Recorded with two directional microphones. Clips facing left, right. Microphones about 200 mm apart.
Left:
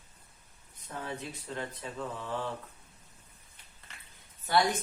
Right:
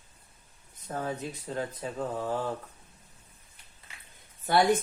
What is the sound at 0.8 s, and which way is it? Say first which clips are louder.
Speech: right 5 dB; 40° right (ahead or behind).